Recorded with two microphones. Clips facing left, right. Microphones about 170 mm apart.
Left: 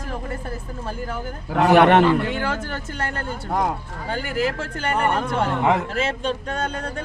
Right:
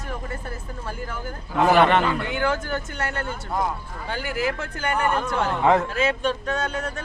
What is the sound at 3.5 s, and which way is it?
Speech, 65° left (ahead or behind).